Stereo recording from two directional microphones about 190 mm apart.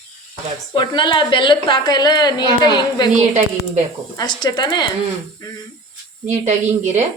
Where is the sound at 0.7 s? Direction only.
25° left (ahead or behind).